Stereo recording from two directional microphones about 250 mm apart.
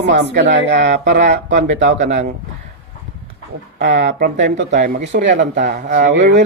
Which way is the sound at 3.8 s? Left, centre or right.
Right.